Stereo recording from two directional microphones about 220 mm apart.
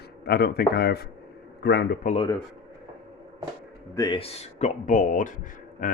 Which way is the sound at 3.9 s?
20° left (ahead or behind).